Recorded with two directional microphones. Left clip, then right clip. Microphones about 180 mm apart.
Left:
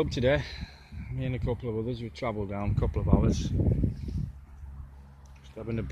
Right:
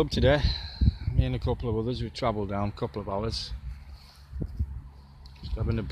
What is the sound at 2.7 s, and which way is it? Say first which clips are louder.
Speech: left 1 dB; centre (ahead or behind).